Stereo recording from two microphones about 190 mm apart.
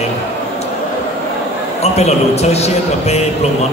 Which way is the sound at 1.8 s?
35° left (ahead or behind).